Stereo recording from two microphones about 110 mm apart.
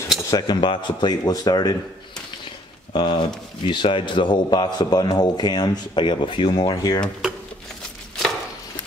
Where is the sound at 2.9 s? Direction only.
45° left (ahead or behind).